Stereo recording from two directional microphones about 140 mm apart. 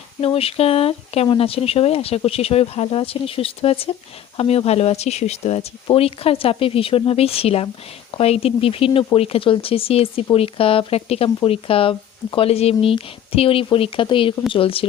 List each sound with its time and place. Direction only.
0.3 s speech: 45° left (ahead or behind)